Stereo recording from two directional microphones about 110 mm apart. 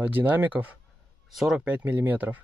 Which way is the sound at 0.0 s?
15° right (ahead or behind).